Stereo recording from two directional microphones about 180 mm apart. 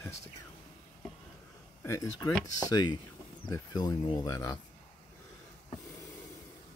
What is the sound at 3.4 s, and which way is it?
Speech, 20° left (ahead or behind).